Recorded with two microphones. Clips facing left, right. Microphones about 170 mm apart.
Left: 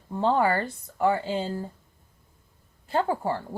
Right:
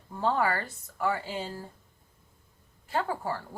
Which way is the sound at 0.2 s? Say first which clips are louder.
Left 5 dB; 30° left (ahead or behind).